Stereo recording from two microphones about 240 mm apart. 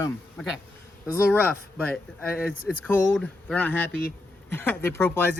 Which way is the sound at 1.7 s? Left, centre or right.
Centre.